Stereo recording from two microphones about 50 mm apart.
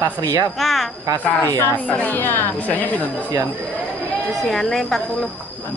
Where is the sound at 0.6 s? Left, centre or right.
Centre.